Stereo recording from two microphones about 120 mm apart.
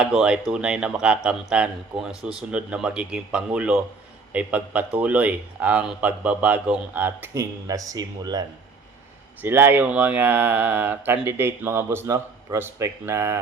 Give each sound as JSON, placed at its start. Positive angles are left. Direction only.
{"t": 0.0, "sound": "a man's voice", "side_deg": -5}
{"t": 9.4, "sound": "a man's voice", "side_deg": -15}